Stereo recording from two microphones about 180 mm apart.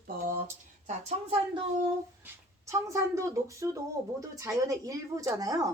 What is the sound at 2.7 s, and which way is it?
Speech, 15° right (ahead or behind).